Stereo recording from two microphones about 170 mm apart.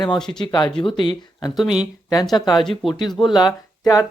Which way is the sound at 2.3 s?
25° left (ahead or behind).